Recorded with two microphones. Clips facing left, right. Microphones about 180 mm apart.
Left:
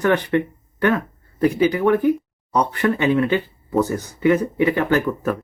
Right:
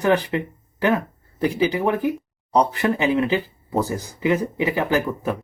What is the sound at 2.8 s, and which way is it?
Speech, 25° right (ahead or behind).